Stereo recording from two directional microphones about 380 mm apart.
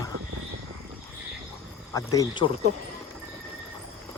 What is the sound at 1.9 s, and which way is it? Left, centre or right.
Speech, centre.